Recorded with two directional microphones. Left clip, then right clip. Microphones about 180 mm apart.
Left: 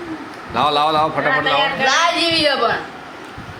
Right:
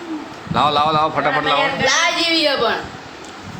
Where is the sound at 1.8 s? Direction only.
40° right (ahead or behind).